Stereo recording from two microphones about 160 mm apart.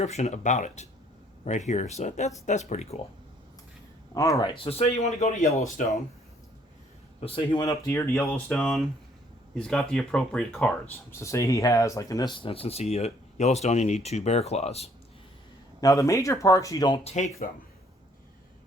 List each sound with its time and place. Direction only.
0.0 s speech: 45° left (ahead or behind)
4.1 s speech: 20° left (ahead or behind)
4.5 s speech: 35° left (ahead or behind)
7.2 s speech: 35° left (ahead or behind); by 10.8 s 5° left (ahead or behind)
10.9 s speech: 15° left (ahead or behind); by 14.8 s 40° left (ahead or behind)
15.8 s speech: 20° left (ahead or behind)
17.0 s speech: 45° left (ahead or behind)